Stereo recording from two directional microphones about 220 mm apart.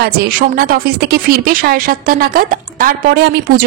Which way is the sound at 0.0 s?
45° right (ahead or behind).